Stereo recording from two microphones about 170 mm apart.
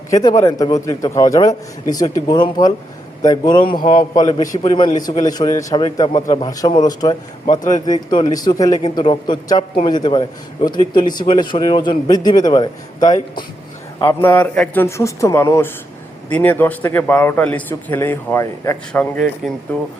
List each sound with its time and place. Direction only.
0.1 s a man's voice: 20° left (ahead or behind)
14.0 s a man's voice: 15° left (ahead or behind)